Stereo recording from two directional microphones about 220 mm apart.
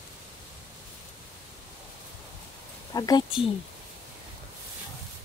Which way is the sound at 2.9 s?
15° left (ahead or behind).